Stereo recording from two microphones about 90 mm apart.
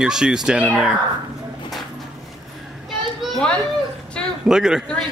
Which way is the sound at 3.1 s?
Centre (ahead or behind).